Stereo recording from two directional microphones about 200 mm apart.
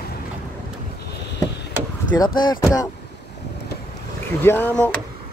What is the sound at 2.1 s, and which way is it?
Speech, 20° left (ahead or behind).